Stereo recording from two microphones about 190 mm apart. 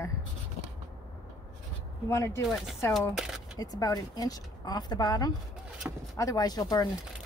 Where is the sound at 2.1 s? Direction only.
15° left (ahead or behind).